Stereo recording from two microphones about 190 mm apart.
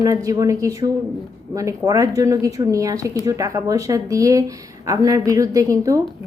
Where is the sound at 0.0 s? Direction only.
15° right (ahead or behind).